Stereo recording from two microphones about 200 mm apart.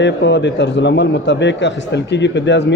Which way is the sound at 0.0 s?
60° left (ahead or behind).